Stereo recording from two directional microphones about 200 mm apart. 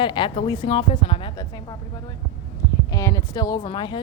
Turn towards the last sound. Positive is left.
turn(degrees=25)  # may be behind; listen again after turning